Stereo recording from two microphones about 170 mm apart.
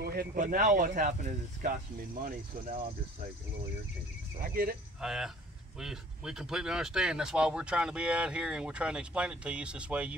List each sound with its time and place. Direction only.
0.0 s speech: 65° right (ahead or behind)
4.4 s speech: 60° right (ahead or behind)
5.0 s speech: 5° right (ahead or behind)